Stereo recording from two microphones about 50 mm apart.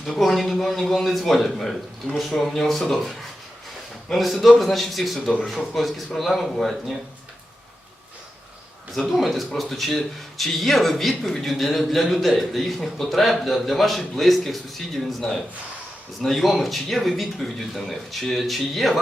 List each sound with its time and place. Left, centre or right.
0.0 s speech: centre
2.0 s speech: centre
2.4 s speech: centre
9.0 s speech: centre